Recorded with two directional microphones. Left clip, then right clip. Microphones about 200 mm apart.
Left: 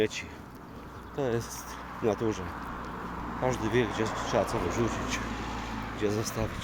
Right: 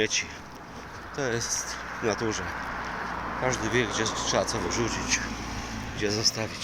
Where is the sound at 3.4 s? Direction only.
10° left (ahead or behind).